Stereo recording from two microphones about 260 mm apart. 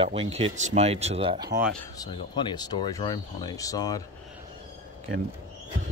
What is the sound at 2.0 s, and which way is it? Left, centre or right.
Speech, centre.